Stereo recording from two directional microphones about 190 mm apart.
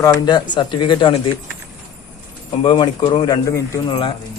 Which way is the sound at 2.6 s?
25° left (ahead or behind).